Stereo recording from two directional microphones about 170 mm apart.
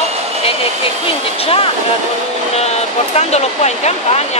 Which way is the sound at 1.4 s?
35° left (ahead or behind).